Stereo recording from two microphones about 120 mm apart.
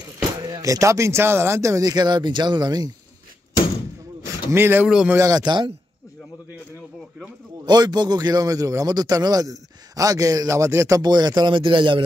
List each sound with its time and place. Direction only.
0.2 s speech: 30° right (ahead or behind)
4.5 s speech: 20° right (ahead or behind)
4.8 s a man's voice: 5° right (ahead or behind)
5.1 s a man's voice: 30° right (ahead or behind)
7.6 s a man's voice: 35° right (ahead or behind)
11.0 s a man's voice: 35° right (ahead or behind)